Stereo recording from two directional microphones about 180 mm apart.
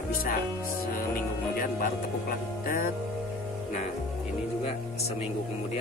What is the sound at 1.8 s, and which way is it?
Music, 50° left (ahead or behind).